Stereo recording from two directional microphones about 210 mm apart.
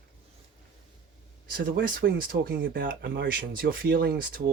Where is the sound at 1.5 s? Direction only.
45° right (ahead or behind).